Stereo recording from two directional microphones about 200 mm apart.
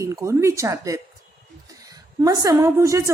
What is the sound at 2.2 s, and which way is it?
Speech, 15° right (ahead or behind).